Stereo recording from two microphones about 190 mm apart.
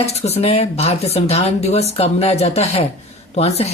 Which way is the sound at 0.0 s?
35° left (ahead or behind).